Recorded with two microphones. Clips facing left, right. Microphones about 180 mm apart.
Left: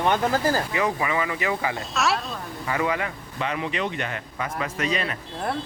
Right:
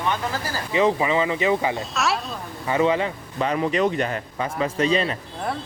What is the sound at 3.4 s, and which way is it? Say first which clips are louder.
A man's voice: right 6 dB; 40° right (ahead or behind).